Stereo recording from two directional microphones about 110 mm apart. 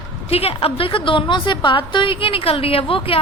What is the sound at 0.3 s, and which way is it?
A woman's voice, 65° left (ahead or behind).